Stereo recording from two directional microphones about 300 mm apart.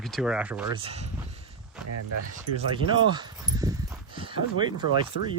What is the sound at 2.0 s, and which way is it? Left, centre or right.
Speech, right.